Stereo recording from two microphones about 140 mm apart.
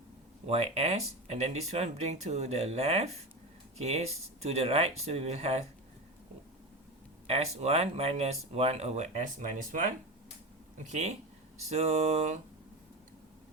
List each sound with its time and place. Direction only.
0.4 s speech: 50° right (ahead or behind)
7.3 s speech: 50° right (ahead or behind)